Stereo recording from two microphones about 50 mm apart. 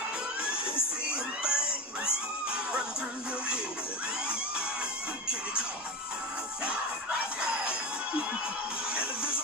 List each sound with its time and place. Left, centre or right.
0.4 s children shouting: centre
2.0 s screaming: right
8.9 s music: centre